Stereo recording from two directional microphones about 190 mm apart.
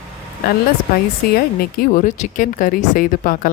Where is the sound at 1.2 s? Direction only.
55° left (ahead or behind).